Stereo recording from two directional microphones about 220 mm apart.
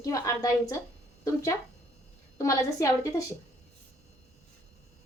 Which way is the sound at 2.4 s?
15° left (ahead or behind).